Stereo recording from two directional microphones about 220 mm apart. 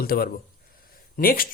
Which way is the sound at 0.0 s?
45° left (ahead or behind).